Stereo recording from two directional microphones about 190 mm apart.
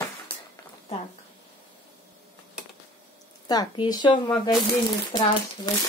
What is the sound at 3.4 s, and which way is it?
Speech, 20° left (ahead or behind).